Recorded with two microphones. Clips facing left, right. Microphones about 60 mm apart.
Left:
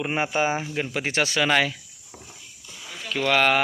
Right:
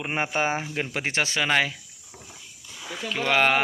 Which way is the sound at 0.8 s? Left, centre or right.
Right.